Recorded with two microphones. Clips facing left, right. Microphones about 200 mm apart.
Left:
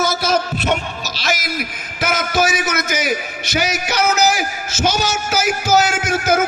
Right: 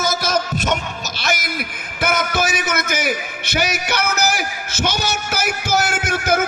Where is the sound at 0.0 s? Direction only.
45° right (ahead or behind).